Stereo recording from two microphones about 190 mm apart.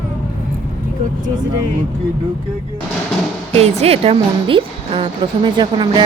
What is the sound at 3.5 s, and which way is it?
A woman's voice, 30° right (ahead or behind).